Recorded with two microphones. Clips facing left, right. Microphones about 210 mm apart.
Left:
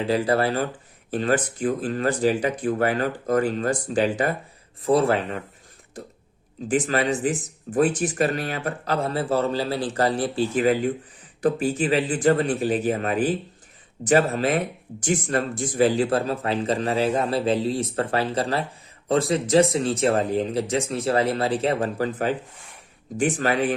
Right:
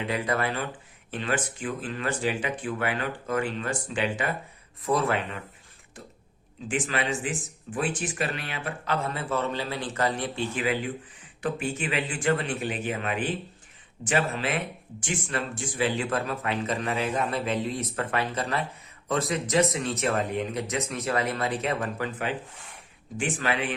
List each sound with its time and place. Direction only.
0.0 s speech: 35° left (ahead or behind)
6.7 s speech: 40° left (ahead or behind)